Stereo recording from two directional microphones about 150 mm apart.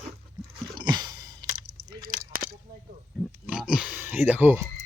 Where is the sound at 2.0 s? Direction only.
75° right (ahead or behind).